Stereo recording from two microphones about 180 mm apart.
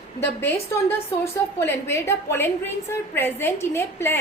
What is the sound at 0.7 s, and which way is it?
A woman's voice, 15° left (ahead or behind).